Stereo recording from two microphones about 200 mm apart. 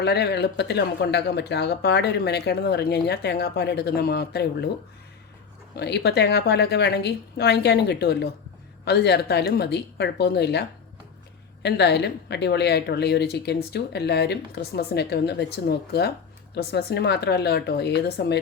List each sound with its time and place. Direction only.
0.0 s speech: 55° left (ahead or behind)
5.7 s speech: 55° left (ahead or behind)
11.6 s speech: 60° left (ahead or behind)